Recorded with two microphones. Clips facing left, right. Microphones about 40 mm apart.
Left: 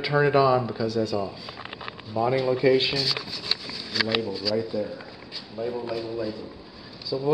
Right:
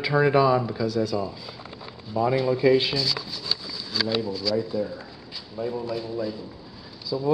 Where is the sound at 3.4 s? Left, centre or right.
Left.